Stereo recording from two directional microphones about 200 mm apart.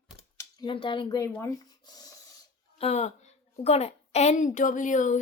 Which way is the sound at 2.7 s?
30° left (ahead or behind).